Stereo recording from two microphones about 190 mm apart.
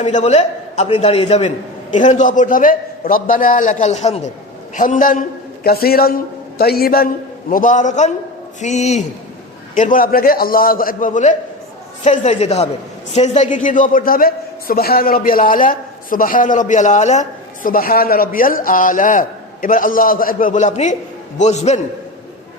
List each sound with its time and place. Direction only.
0.0 s a man's voice: 40° left (ahead or behind)